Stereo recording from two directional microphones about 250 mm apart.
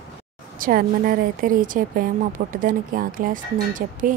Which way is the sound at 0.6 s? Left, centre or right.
Right.